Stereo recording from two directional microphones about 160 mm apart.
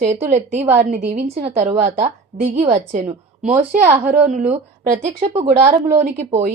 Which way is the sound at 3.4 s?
45° right (ahead or behind).